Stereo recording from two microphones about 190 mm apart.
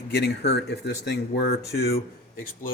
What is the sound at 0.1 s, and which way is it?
Speech, 60° left (ahead or behind).